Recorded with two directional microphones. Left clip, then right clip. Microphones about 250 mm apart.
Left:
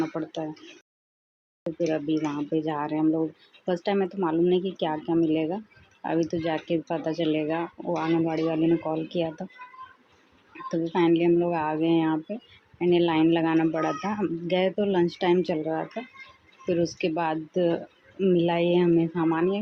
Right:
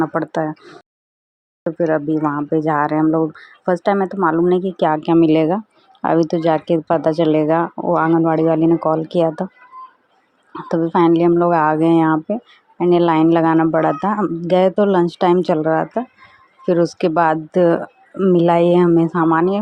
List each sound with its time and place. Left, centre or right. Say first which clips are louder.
0.0 s speech: right 11 dB; right
1.8 s speech: right 9 dB; centre
10.7 s speech: right 9 dB; right